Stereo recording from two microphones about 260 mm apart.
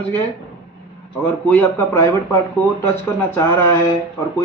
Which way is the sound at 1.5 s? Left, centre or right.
Centre.